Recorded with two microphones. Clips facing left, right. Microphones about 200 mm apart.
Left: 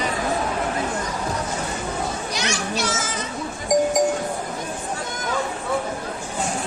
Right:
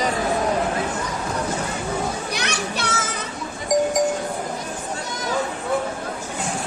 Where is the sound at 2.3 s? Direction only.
60° right (ahead or behind).